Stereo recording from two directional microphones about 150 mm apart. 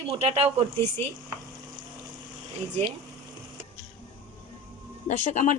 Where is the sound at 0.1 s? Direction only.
40° right (ahead or behind).